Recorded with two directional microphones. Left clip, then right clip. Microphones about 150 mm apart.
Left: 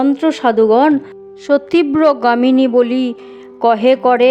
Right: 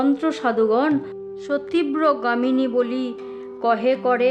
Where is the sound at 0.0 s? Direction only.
40° left (ahead or behind).